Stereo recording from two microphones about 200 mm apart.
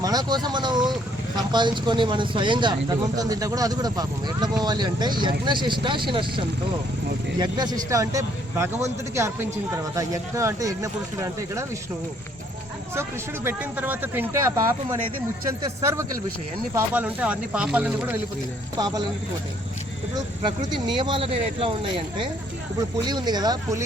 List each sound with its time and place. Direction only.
0.0 s vehicle: 20° right (ahead or behind)
1.4 s speech: 20° right (ahead or behind)
12.9 s speech: 10° right (ahead or behind)
18.8 s speech: 20° right (ahead or behind)
20.4 s speech: 20° right (ahead or behind)